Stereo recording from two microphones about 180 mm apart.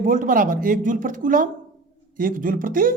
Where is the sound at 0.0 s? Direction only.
50° right (ahead or behind).